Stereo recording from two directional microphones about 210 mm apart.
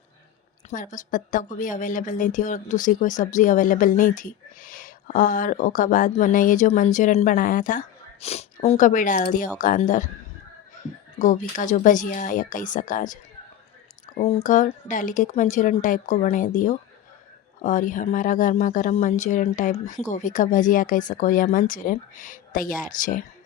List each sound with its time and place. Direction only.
0.7 s a woman's voice: 35° left (ahead or behind)
11.2 s a woman's voice: 35° left (ahead or behind)
14.2 s a woman's voice: 30° left (ahead or behind)